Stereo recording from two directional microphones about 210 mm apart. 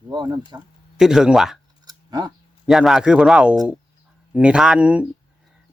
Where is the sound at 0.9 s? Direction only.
Centre (ahead or behind).